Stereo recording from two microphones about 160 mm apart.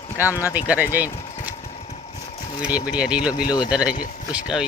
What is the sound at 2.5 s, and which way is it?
Speech, 10° right (ahead or behind).